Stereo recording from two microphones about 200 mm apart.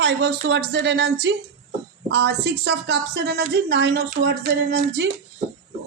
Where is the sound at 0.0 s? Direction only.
60° right (ahead or behind).